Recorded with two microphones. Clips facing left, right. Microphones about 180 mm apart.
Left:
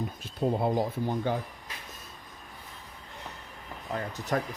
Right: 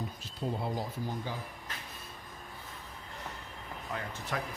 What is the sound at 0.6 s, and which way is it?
Speech, 60° left (ahead or behind).